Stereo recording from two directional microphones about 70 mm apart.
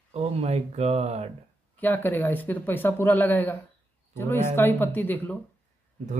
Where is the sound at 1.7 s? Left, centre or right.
Left.